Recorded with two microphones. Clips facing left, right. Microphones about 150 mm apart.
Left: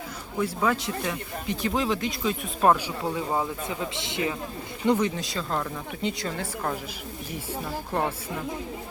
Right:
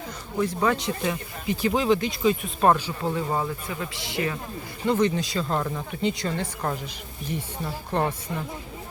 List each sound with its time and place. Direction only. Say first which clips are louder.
0.3 s speech: right 2 dB; 5° left (ahead or behind)
2.7 s speech: right 2 dB; 10° left (ahead or behind)
3.7 s speech: left 1 dB; 20° left (ahead or behind)
4.9 s speech: right 1 dB; 5° left (ahead or behind)